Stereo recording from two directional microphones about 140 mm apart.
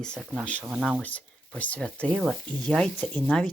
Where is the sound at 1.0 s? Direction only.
10° left (ahead or behind).